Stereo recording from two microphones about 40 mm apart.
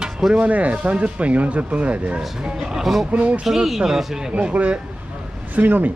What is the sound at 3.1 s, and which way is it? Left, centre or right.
Speech, right.